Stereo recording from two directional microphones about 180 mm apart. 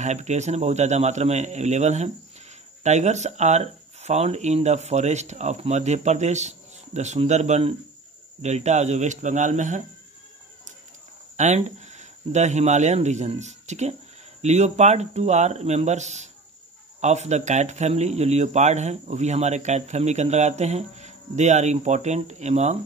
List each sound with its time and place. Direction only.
0.0 s a man's voice: 40° right (ahead or behind)
11.3 s a man's voice: 40° right (ahead or behind)